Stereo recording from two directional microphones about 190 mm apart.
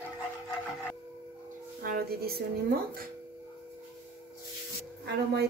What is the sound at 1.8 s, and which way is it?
Speech, 50° right (ahead or behind).